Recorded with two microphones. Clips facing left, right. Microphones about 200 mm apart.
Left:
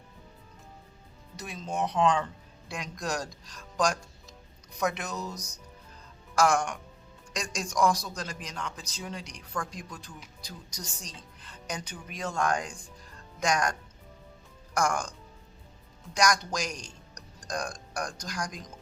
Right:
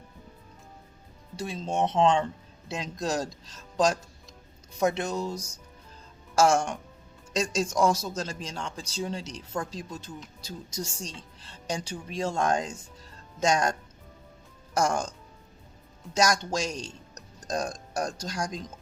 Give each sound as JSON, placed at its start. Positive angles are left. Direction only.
{"t": 1.4, "sound": "speech", "side_deg": -30}
{"t": 16.1, "sound": "speech", "side_deg": -25}